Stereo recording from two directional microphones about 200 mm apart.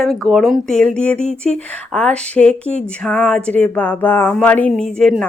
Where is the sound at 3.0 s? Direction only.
5° left (ahead or behind).